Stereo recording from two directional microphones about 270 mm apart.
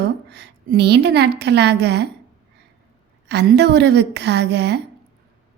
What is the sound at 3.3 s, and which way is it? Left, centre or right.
A woman's voice, right.